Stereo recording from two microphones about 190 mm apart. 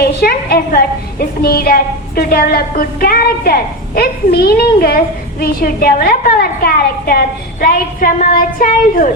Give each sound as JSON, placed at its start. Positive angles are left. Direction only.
{"t": 0.0, "sound": "a woman's voice", "side_deg": 55}